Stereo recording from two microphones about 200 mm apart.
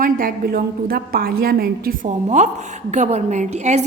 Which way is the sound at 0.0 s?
45° right (ahead or behind).